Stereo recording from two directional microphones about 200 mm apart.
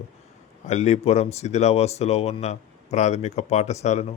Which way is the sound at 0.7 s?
35° left (ahead or behind).